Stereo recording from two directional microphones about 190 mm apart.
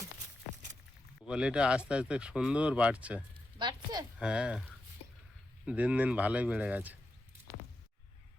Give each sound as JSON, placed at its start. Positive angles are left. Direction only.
{"t": 1.2, "sound": "speech", "side_deg": -5}
{"t": 3.6, "sound": "a sound", "side_deg": -20}
{"t": 4.2, "sound": "speech", "side_deg": -5}
{"t": 5.6, "sound": "speech", "side_deg": -5}